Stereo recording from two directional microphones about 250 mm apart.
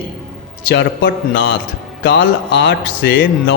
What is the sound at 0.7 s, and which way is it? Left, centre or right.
A man's voice, left.